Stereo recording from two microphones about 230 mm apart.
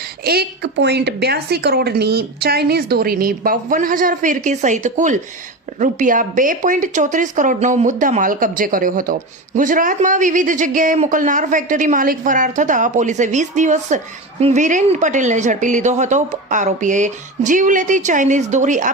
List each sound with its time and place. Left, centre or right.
0.3 s a woman's voice: right